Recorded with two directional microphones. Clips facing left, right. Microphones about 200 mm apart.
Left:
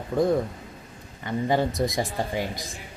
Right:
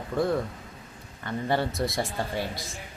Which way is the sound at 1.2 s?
15° left (ahead or behind).